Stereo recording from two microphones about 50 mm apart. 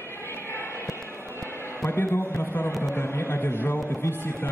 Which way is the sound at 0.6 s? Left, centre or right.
Left.